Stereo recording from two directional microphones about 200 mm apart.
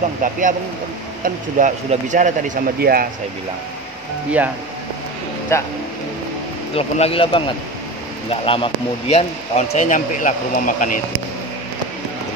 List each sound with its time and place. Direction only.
0.2 s speech: 40° right (ahead or behind)
5.5 s speech: 15° left (ahead or behind)
6.7 s speech: 30° left (ahead or behind)